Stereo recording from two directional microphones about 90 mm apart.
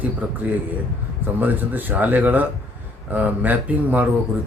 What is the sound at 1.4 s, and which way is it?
Speech, 20° right (ahead or behind).